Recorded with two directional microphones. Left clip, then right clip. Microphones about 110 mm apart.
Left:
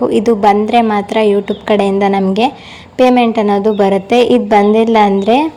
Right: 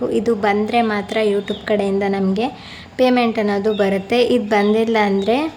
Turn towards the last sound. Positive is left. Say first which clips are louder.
# left 7 dB
turn(degrees=40)  # may be behind; listen again after turning